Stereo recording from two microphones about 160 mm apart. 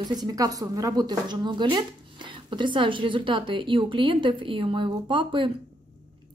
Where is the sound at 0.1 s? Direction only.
25° right (ahead or behind).